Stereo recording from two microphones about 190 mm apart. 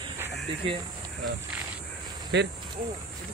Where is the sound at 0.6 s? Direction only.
25° right (ahead or behind).